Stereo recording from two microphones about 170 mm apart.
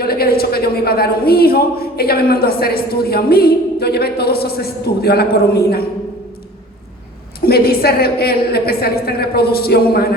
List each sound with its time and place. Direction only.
0.0 s a man's voice: 65° left (ahead or behind)
7.4 s a man's voice: 65° left (ahead or behind)